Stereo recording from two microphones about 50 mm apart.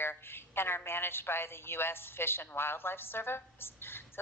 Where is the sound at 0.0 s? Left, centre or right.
Left.